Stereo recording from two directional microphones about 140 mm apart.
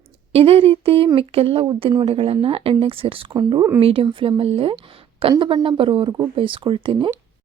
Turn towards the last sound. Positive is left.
turn(degrees=-35)  # may be behind; listen again after turning